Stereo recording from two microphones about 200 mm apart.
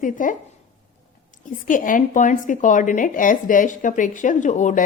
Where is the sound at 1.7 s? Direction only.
40° left (ahead or behind).